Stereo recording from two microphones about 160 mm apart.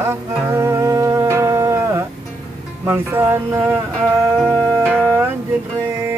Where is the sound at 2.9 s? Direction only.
15° right (ahead or behind).